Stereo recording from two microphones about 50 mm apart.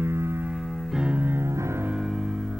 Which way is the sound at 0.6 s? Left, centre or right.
Centre.